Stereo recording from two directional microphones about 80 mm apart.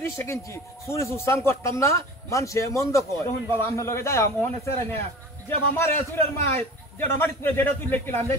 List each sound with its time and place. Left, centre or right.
0.0 s a man's voice: left